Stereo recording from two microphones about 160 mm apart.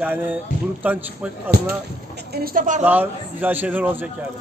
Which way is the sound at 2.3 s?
65° right (ahead or behind).